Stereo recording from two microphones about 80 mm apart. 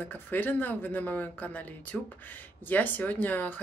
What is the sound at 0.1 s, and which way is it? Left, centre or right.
Speech, left.